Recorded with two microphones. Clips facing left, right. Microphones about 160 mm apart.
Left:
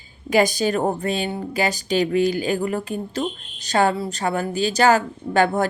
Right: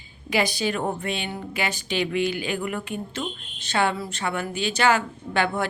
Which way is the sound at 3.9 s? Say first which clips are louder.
Left 5 dB; 25° left (ahead or behind).